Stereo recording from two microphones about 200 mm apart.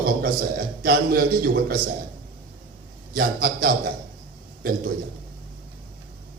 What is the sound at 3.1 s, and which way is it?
Speech, 50° right (ahead or behind).